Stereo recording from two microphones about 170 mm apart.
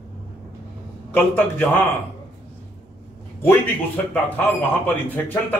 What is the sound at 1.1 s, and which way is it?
Speech, 10° left (ahead or behind).